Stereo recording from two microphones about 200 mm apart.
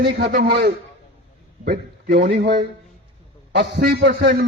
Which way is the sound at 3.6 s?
55° right (ahead or behind).